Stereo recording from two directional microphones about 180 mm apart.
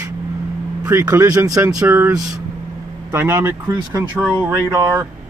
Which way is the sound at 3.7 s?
25° right (ahead or behind).